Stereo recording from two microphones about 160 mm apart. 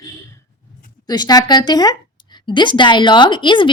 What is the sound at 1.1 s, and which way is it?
A woman's voice, 25° left (ahead or behind).